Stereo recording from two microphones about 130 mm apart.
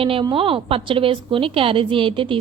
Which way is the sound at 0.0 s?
45° right (ahead or behind).